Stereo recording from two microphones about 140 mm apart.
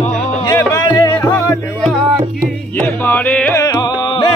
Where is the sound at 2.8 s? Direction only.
15° left (ahead or behind).